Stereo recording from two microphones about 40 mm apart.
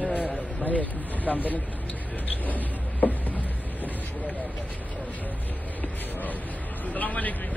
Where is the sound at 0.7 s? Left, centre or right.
Left.